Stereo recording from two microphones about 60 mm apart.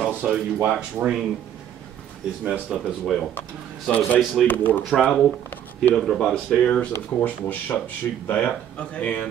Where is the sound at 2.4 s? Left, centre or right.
Right.